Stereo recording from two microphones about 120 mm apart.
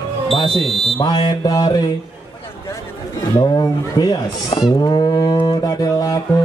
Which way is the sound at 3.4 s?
35° left (ahead or behind).